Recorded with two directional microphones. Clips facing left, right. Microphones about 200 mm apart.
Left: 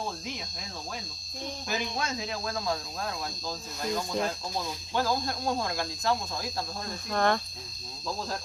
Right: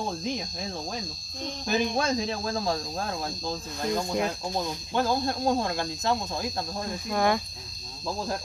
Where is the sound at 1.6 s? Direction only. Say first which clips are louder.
Right 8 dB; 30° right (ahead or behind).